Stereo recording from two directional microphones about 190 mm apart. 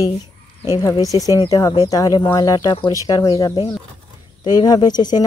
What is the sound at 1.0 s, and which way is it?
Speech, 20° left (ahead or behind).